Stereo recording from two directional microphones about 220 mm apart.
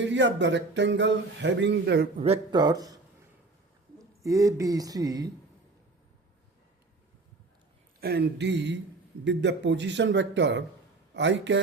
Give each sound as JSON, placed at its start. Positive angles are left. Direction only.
{"t": 0.0, "sound": "speech", "side_deg": -55}
{"t": 2.2, "sound": "speech", "side_deg": -25}
{"t": 8.0, "sound": "speech", "side_deg": -50}